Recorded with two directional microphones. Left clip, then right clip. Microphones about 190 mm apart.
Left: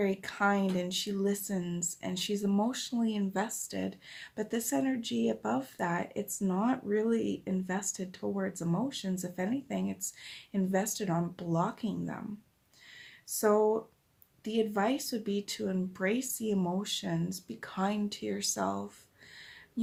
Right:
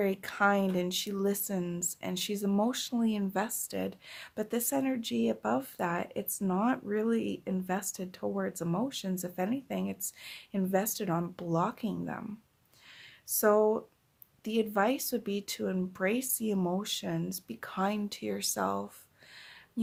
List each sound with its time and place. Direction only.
0.0 s speech: 40° right (ahead or behind)
13.2 s speech: 45° right (ahead or behind)